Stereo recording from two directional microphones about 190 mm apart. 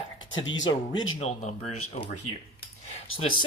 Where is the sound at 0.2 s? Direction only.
85° left.